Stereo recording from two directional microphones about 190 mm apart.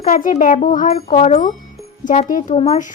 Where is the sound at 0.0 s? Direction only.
45° left (ahead or behind).